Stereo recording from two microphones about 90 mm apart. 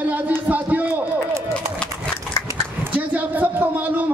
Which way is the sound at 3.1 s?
20° right (ahead or behind).